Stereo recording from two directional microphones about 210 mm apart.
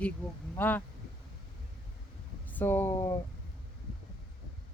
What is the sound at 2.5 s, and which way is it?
Speech, 10° left (ahead or behind).